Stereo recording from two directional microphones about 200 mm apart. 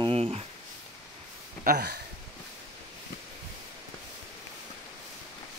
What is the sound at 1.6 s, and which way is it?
Speech, 50° right (ahead or behind).